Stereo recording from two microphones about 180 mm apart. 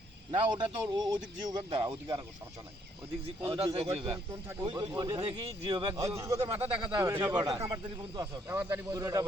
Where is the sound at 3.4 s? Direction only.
30° right (ahead or behind).